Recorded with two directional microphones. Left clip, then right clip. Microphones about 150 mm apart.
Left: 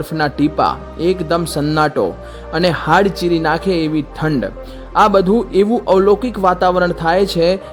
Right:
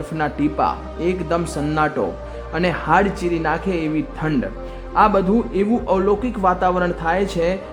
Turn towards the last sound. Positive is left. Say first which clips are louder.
# left 6 dB
turn(degrees=40)  # may be behind; listen again after turning